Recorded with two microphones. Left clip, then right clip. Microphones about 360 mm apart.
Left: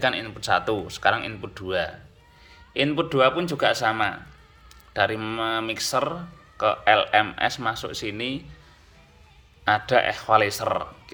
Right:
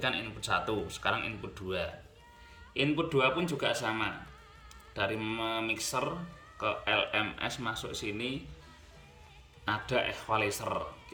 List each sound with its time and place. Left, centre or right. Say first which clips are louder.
0.0 s speech: left 9 dB; centre
9.6 s speech: left 11 dB; centre